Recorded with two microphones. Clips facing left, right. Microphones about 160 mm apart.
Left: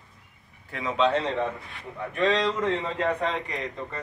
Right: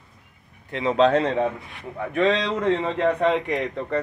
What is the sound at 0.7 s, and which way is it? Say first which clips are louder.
Speech: right 7 dB; 30° right (ahead or behind).